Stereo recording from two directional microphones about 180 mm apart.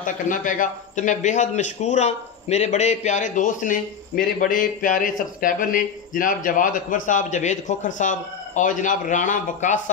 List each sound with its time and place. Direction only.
0.0 s a man's voice: 45° left (ahead or behind)